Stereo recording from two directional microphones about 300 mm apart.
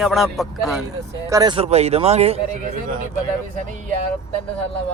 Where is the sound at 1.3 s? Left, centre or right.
Centre.